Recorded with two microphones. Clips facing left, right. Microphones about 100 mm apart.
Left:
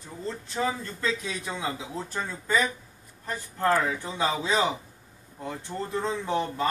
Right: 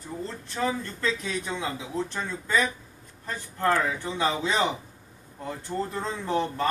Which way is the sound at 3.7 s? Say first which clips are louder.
Even; 20° left (ahead or behind).